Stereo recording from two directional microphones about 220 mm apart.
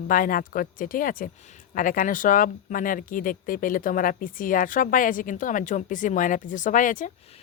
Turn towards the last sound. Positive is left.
turn(degrees=35)  # may be behind; listen again after turning